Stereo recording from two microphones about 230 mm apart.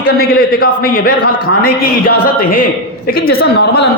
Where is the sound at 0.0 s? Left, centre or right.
Left.